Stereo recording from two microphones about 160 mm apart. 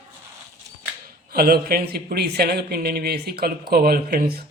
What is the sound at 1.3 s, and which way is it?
Speech, 70° right (ahead or behind).